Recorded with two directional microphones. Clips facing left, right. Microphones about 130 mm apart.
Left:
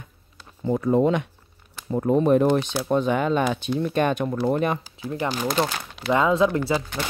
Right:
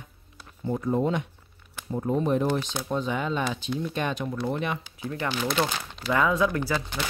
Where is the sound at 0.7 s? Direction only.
85° left; by 4.7 s 50° left (ahead or behind).